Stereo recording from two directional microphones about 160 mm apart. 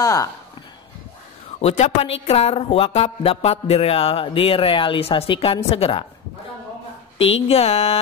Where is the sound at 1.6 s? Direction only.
40° left (ahead or behind).